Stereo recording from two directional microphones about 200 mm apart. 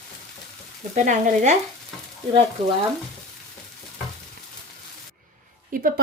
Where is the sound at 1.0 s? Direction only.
40° right (ahead or behind).